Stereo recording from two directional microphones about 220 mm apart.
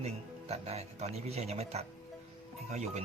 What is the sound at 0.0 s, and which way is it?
Speech, 30° right (ahead or behind).